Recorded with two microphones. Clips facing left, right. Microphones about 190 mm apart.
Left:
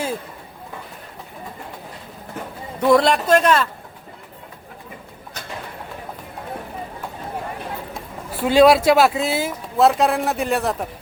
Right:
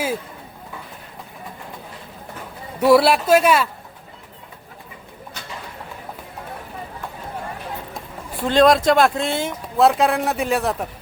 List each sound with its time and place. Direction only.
2.8 s speech: 10° right (ahead or behind)
8.4 s speech: 5° left (ahead or behind)